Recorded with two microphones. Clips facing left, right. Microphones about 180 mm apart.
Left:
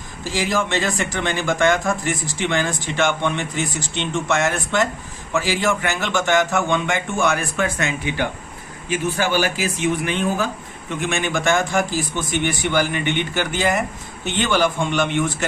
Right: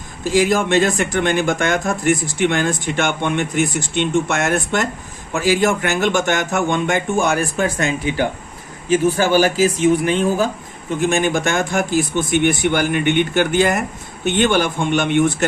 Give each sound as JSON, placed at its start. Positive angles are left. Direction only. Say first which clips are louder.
{"t": 0.3, "sound": "speech", "louder": "right 7 dB", "side_deg": -50}